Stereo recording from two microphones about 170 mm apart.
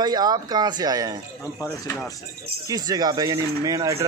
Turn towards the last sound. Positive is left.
turn(degrees=-20)  # may be behind; listen again after turning